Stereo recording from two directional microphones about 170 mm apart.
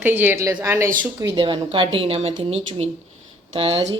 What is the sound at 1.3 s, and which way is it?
Speech, 30° right (ahead or behind).